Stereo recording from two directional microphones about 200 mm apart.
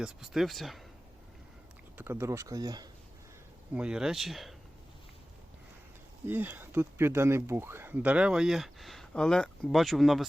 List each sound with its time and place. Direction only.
0.0 s speech: centre (ahead or behind)
2.0 s speech: 10° right (ahead or behind)
3.8 s speech: 5° right (ahead or behind)
6.2 s speech: 10° right (ahead or behind)